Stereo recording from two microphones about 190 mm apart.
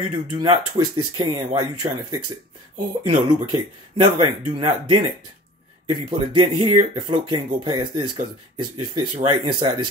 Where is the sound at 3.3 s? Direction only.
25° right (ahead or behind).